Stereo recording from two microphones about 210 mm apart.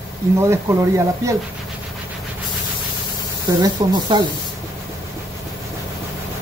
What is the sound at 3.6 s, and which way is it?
Speech, 20° right (ahead or behind).